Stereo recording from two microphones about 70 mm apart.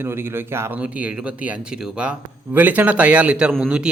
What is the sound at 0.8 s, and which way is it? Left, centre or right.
Speech, centre.